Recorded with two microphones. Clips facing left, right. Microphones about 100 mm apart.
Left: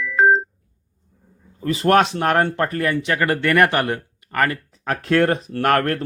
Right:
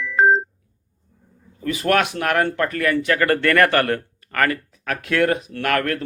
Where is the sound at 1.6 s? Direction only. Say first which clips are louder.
Left 3 dB; 30° left (ahead or behind).